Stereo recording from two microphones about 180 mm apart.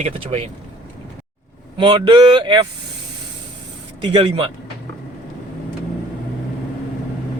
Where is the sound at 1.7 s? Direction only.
25° right (ahead or behind).